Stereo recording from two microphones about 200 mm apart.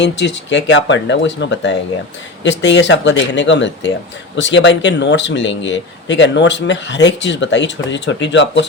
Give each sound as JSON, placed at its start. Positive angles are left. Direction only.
{"t": 0.0, "sound": "speech", "side_deg": 60}